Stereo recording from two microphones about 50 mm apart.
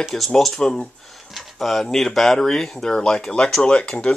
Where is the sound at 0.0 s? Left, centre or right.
Centre.